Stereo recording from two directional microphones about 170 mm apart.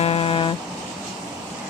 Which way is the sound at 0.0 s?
35° left (ahead or behind).